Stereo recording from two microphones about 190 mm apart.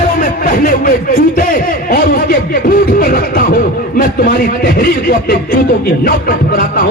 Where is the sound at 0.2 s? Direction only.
45° left (ahead or behind).